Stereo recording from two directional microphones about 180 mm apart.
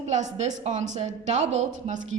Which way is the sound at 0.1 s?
40° right (ahead or behind).